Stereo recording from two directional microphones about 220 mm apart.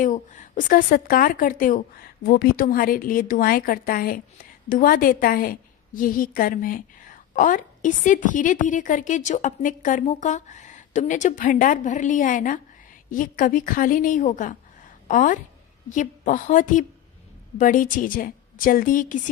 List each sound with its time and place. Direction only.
0.0 s a woman's voice: 35° left (ahead or behind)